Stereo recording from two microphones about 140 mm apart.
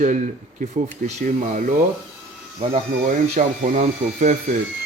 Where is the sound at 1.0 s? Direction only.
65° right (ahead or behind).